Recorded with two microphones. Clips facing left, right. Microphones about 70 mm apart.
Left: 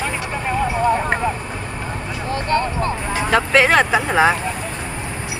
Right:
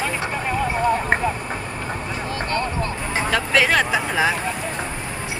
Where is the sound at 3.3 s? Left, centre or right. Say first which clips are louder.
Left 5 dB; left.